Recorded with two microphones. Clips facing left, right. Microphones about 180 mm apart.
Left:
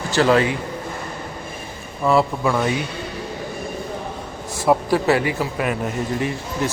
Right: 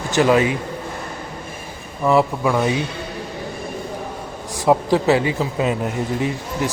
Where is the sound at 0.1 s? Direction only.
15° right (ahead or behind).